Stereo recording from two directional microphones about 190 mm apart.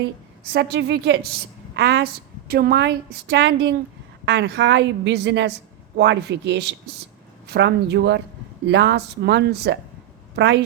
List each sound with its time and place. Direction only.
0.5 s a woman's voice: 60° right (ahead or behind)